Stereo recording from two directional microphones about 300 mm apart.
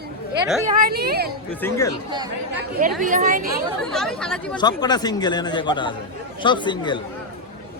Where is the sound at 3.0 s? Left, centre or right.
Right.